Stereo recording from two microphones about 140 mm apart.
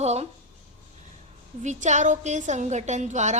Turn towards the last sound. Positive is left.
turn(degrees=-55)  # may be behind; listen again after turning